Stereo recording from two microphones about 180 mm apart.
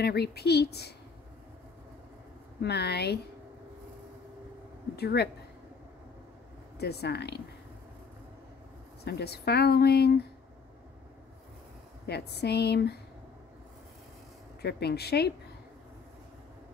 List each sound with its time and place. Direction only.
0.0 s speech: 65° left (ahead or behind)
2.6 s speech: 65° left (ahead or behind)
4.9 s speech: 65° left (ahead or behind)
6.8 s speech: 65° left (ahead or behind)
9.0 s speech: 65° left (ahead or behind)
12.1 s speech: 65° left (ahead or behind)
14.6 s speech: 65° left (ahead or behind)